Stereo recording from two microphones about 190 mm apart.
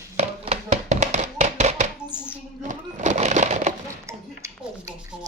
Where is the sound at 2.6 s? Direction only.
40° right (ahead or behind).